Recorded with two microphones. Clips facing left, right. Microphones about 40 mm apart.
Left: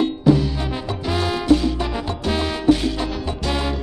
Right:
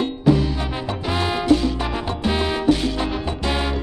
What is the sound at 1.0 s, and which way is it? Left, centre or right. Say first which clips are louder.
Music: even; centre.